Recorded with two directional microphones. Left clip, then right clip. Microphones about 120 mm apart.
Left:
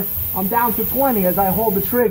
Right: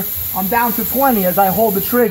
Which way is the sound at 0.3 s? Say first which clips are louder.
Right 2 dB; 50° right (ahead or behind).